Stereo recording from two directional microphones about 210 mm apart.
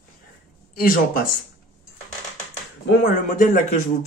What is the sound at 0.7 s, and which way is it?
Speech, 40° left (ahead or behind).